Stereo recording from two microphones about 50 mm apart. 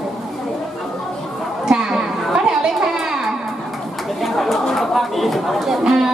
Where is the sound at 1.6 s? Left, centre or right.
Centre.